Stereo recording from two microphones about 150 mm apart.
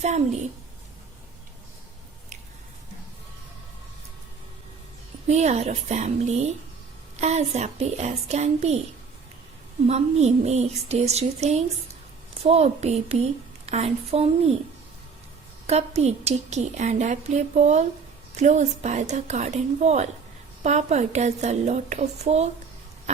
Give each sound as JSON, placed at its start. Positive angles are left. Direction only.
{"t": 5.3, "sound": "a woman's voice", "side_deg": -50}
{"t": 9.8, "sound": "a woman's voice", "side_deg": -45}
{"t": 15.6, "sound": "a woman's voice", "side_deg": -45}